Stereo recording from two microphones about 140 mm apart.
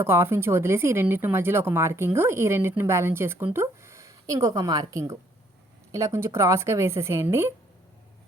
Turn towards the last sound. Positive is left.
turn(degrees=-20)  # may be behind; listen again after turning